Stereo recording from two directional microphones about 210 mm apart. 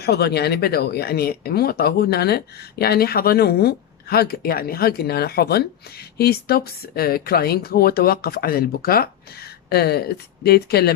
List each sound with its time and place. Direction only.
0.0 s speech: 50° left (ahead or behind)